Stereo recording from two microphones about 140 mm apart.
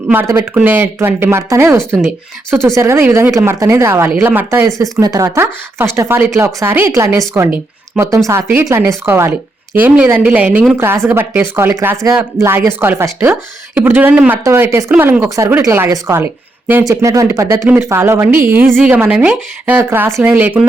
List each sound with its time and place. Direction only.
0.1 s speech: 20° right (ahead or behind)